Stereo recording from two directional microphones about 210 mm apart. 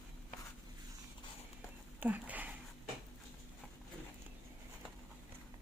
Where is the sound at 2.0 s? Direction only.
10° right (ahead or behind).